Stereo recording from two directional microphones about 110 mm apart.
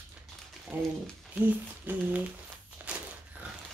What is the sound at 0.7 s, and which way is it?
A woman's voice, 20° right (ahead or behind).